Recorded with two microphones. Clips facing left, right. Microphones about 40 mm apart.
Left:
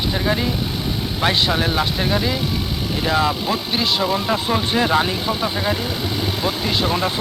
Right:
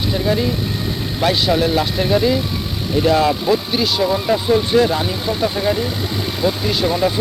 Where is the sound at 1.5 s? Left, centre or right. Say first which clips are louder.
Right 3 dB; centre.